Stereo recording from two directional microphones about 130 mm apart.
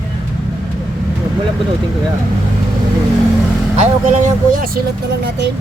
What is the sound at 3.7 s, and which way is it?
Speech, 60° right (ahead or behind).